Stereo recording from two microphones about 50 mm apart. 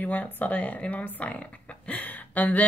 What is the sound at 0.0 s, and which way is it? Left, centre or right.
Speech, left.